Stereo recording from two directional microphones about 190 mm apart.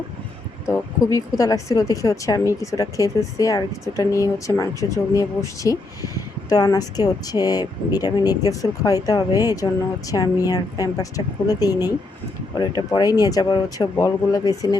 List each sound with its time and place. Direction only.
0.7 s speech: 15° left (ahead or behind)